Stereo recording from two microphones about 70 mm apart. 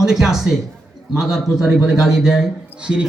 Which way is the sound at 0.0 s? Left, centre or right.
Centre.